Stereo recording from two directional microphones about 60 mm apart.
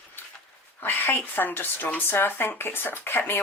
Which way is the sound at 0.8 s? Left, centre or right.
Left.